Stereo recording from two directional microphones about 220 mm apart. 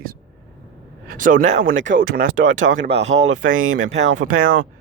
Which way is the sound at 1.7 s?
60° right (ahead or behind).